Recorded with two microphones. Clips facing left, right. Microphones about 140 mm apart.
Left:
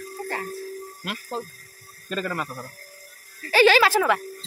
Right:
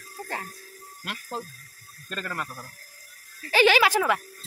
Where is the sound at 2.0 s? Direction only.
10° left (ahead or behind).